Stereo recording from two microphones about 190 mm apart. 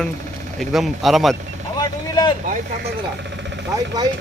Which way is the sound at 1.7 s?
20° left (ahead or behind).